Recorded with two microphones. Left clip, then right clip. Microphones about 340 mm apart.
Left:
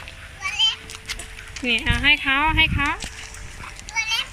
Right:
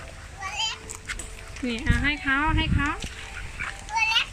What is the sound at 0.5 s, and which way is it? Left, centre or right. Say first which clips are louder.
Children playing: left 9 dB; right.